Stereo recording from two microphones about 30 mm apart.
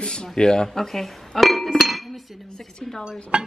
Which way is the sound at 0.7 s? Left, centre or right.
Centre.